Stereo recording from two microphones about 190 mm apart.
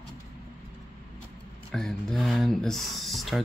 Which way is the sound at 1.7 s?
Centre (ahead or behind).